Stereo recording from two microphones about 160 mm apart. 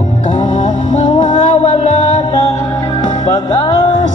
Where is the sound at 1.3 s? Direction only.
45° left (ahead or behind).